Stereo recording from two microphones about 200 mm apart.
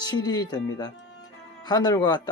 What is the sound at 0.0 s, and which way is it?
Speech, 20° left (ahead or behind).